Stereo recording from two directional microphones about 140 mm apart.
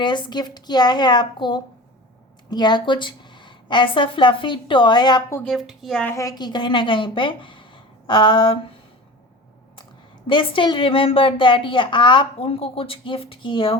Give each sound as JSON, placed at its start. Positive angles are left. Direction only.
{"t": 0.0, "sound": "speech", "side_deg": 35}
{"t": 5.4, "sound": "speech", "side_deg": 0}
{"t": 6.1, "sound": "speech", "side_deg": 25}
{"t": 10.2, "sound": "speech", "side_deg": 35}